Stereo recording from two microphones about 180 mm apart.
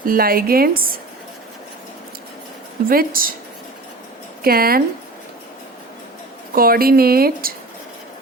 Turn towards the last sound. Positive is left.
turn(degrees=-55)  # may be behind; listen again after turning